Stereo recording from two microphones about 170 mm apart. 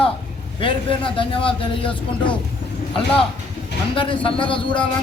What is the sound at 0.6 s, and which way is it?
A man's voice, 30° left (ahead or behind).